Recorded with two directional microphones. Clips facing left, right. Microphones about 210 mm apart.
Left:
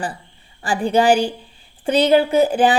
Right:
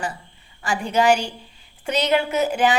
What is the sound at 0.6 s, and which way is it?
A woman's voice, 30° left (ahead or behind).